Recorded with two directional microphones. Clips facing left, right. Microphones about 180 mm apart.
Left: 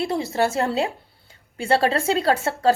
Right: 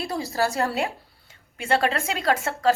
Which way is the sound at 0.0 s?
25° left (ahead or behind).